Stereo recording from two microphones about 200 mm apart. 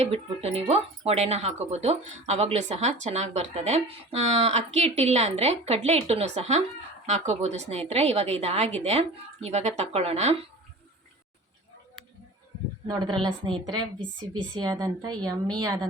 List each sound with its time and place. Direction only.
0.0 s speech: 30° right (ahead or behind)
12.9 s a woman's voice: 20° right (ahead or behind)